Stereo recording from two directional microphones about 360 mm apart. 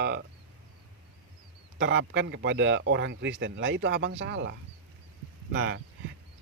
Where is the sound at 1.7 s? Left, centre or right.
Right.